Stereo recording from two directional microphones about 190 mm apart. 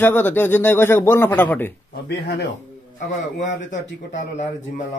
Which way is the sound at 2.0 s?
55° left (ahead or behind).